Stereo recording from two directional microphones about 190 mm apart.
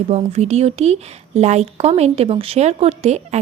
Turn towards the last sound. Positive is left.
turn(degrees=-35)  # may be behind; listen again after turning